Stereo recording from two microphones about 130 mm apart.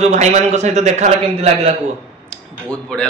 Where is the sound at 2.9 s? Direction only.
5° left (ahead or behind).